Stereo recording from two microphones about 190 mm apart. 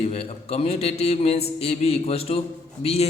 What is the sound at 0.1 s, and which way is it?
A man's voice, 30° left (ahead or behind).